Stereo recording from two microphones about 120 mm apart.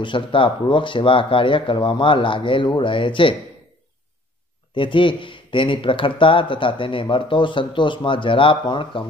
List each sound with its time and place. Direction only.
0.0 s speech: 45° left (ahead or behind)
4.7 s speech: 45° left (ahead or behind)